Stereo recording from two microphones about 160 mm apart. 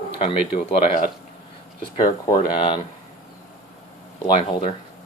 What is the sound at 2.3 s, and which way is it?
Speech, 30° left (ahead or behind).